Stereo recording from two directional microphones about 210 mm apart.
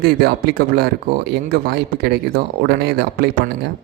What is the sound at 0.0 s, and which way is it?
Speech, 50° right (ahead or behind).